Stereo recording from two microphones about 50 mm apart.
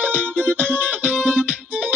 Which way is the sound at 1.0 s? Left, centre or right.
Right.